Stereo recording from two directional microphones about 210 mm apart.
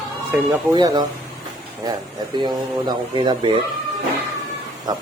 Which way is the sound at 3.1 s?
20° right (ahead or behind).